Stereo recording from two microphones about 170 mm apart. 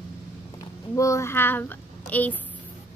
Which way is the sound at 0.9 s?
15° left (ahead or behind).